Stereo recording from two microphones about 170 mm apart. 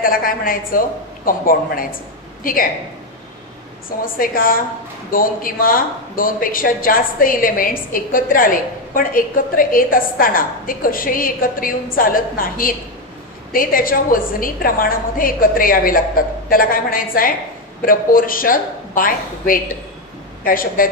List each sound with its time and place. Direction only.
0.0 s speech: 55° left (ahead or behind)
4.0 s speech: 55° left (ahead or behind)